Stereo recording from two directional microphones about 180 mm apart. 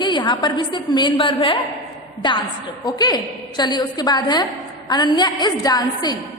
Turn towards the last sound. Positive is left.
turn(degrees=20)  # may be behind; listen again after turning